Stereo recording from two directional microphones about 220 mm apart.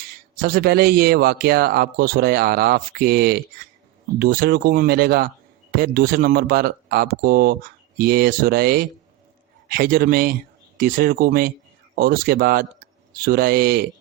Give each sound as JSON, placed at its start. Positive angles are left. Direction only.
{"t": 0.4, "sound": "a man's voice", "side_deg": -45}